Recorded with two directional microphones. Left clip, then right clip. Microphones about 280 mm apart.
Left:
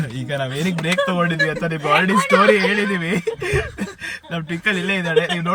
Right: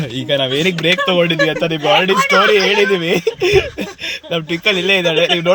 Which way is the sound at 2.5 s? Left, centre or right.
Centre.